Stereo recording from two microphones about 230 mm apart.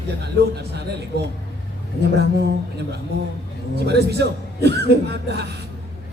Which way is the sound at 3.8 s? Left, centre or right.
Right.